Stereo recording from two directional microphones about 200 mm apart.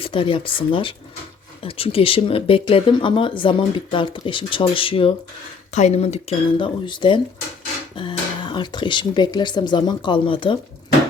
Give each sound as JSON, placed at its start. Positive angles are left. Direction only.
{"t": 0.0, "sound": "speech", "side_deg": 25}